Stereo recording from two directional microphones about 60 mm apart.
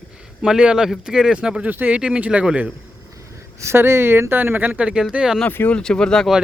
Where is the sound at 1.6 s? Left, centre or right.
Right.